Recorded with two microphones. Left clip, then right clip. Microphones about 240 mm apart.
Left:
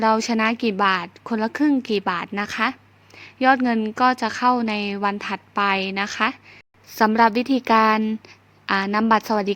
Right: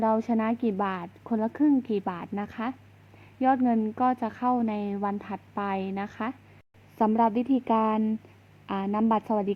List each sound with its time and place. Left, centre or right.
0.0 s a woman's voice: left
0.5 s a woman's voice: left
0.8 s a woman's voice: left
1.8 s a woman's voice: left
2.0 s a woman's voice: left
7.3 s speech: left
7.6 s a woman's voice: left